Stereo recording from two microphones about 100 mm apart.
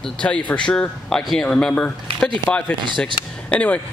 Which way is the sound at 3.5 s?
15° left (ahead or behind).